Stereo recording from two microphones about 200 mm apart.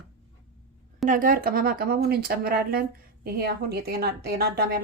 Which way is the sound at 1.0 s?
40° right (ahead or behind).